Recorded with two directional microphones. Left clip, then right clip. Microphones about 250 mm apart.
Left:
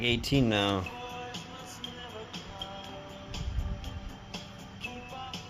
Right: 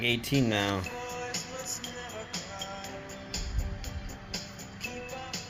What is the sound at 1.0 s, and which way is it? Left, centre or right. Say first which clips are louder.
Music: right 4 dB; right.